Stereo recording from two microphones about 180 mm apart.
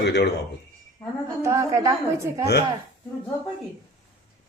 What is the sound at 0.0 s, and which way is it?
Speech, 65° left (ahead or behind).